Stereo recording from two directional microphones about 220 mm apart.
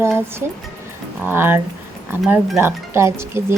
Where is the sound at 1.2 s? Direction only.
10° right (ahead or behind).